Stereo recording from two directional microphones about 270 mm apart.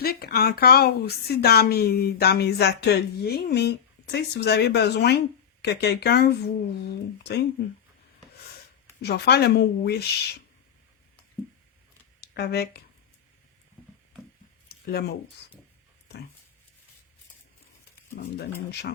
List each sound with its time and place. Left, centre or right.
0.0 s speech: left
9.0 s speech: left
12.2 s speech: left
14.7 s a sound: left
18.7 s speech: left